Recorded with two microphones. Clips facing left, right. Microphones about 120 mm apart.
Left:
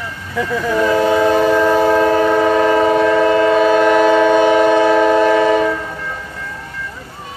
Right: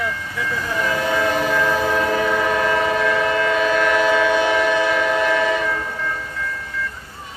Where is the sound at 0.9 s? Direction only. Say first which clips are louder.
Left 7 dB; 35° left (ahead or behind).